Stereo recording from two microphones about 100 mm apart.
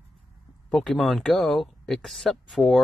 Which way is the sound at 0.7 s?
5° left (ahead or behind).